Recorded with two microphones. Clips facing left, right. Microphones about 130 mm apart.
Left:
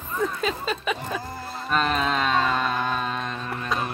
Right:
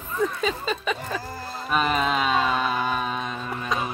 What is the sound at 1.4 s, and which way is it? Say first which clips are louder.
Music: even; centre (ahead or behind).